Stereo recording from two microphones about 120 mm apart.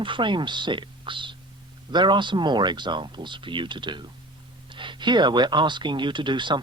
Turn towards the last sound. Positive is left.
turn(degrees=-40)  # may be behind; listen again after turning